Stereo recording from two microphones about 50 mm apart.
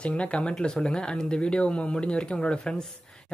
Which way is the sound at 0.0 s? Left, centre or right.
Left.